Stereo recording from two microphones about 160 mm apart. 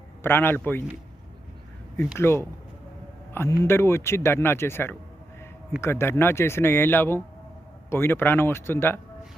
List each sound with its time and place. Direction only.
0.2 s speech: 15° left (ahead or behind)
2.1 s speech: 15° left (ahead or behind)